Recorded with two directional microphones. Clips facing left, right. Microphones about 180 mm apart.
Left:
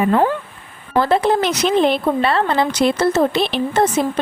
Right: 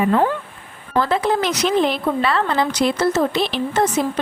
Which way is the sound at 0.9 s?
30° left (ahead or behind).